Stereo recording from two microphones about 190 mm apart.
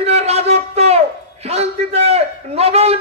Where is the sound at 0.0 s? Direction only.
35° right (ahead or behind).